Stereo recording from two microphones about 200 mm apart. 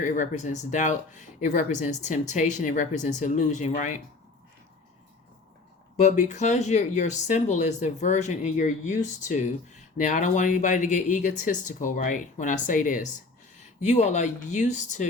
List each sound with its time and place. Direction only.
0.0 s speech: 40° left (ahead or behind)
6.0 s speech: 35° left (ahead or behind)